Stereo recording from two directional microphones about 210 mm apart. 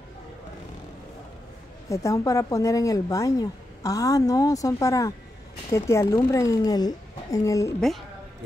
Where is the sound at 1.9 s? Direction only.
15° left (ahead or behind).